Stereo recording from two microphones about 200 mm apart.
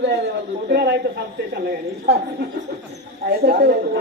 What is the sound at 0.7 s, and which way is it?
Speech, 55° right (ahead or behind).